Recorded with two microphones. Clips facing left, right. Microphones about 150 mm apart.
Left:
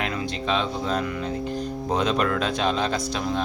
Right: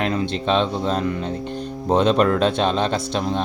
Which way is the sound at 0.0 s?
35° right (ahead or behind).